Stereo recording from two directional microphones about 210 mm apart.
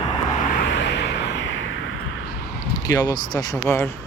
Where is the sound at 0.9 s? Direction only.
55° left (ahead or behind).